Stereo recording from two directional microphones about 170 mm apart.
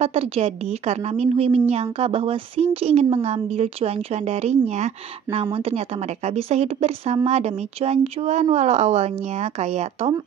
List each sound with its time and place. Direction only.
0.0 s a woman's voice: 40° right (ahead or behind)